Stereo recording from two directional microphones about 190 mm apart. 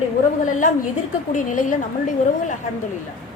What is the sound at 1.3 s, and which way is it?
Speech, 40° left (ahead or behind).